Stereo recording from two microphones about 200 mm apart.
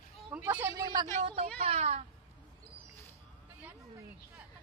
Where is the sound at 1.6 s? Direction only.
30° right (ahead or behind).